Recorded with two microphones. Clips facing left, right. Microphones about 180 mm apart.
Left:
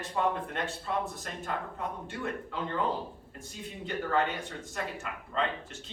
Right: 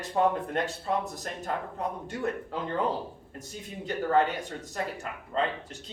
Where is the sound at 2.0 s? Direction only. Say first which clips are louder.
Right 4 dB; 40° right (ahead or behind).